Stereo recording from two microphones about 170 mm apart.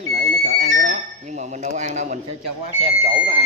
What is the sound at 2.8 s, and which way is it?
Speech, 35° right (ahead or behind).